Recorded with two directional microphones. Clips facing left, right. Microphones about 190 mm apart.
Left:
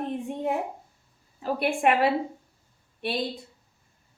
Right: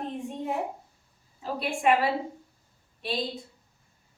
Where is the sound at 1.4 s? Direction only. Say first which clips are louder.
Left 4 dB; 60° left (ahead or behind).